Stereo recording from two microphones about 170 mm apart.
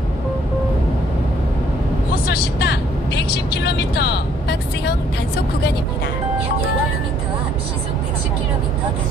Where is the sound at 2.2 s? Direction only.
75° left (ahead or behind).